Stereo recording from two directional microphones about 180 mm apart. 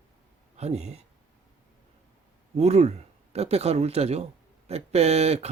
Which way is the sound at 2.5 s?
35° right (ahead or behind).